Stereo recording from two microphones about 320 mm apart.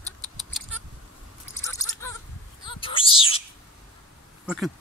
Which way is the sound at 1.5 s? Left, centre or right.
Centre.